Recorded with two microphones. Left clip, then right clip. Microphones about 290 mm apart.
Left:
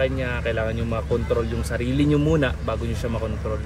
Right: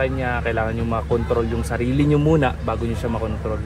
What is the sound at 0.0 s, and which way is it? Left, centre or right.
Speech, centre.